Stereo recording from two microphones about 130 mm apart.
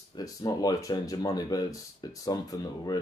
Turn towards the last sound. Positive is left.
turn(degrees=30)  # may be behind; listen again after turning